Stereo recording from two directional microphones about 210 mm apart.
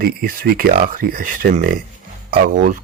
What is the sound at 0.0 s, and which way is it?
Speech, 45° right (ahead or behind).